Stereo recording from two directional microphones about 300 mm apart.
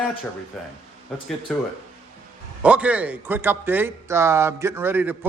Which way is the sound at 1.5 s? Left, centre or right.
Centre.